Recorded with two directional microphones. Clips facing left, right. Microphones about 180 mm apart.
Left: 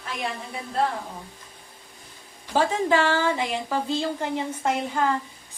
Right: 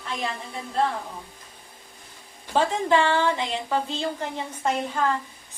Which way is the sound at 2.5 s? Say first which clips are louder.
Even; 10° left (ahead or behind).